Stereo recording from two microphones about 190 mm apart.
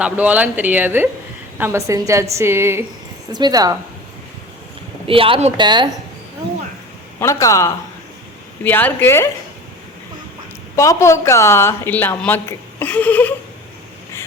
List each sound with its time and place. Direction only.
0.0 s speech: 5° right (ahead or behind)
5.0 s speech: 30° right (ahead or behind)
7.2 s a woman's voice: 15° left (ahead or behind)
10.8 s a woman's voice: 15° left (ahead or behind)